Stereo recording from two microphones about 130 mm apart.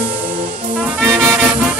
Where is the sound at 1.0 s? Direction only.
20° right (ahead or behind).